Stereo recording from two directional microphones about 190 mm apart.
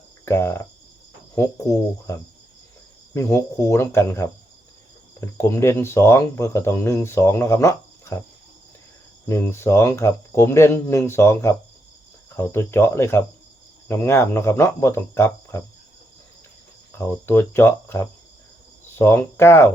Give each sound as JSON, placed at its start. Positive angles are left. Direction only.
{"t": 0.3, "sound": "speech", "side_deg": 15}
{"t": 3.2, "sound": "speech", "side_deg": 15}
{"t": 9.2, "sound": "speech", "side_deg": 15}
{"t": 17.0, "sound": "speech", "side_deg": 15}